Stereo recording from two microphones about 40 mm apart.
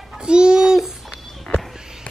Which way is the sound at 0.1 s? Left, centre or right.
Right.